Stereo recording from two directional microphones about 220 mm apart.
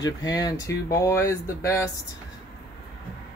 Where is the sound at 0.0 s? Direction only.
15° left (ahead or behind).